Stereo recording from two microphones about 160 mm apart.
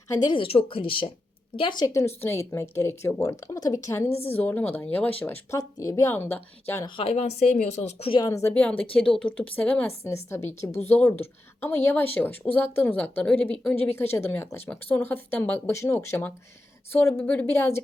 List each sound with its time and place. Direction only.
0.3 s speech: 35° left (ahead or behind)
2.2 s a woman's voice: 15° left (ahead or behind)
6.8 s speech: 35° left (ahead or behind)
8.1 s speech: 20° left (ahead or behind)
8.5 s a woman's voice: 10° left (ahead or behind)